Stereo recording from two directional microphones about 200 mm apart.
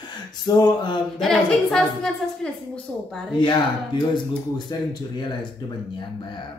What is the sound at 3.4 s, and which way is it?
Speech, 20° left (ahead or behind).